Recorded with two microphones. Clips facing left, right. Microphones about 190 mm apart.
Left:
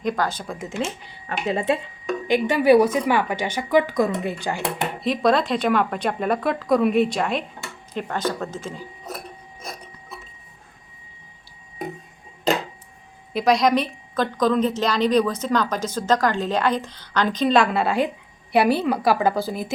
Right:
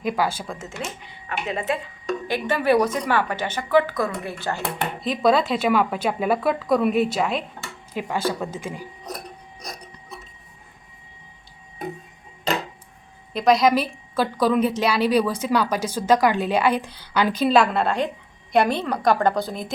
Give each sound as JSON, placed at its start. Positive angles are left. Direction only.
{"t": 0.0, "sound": "a woman's voice", "side_deg": -5}
{"t": 1.3, "sound": "speech", "side_deg": 30}
{"t": 2.2, "sound": "a woman's voice", "side_deg": 15}
{"t": 5.0, "sound": "a woman's voice", "side_deg": 0}
{"t": 13.3, "sound": "a woman's voice", "side_deg": 0}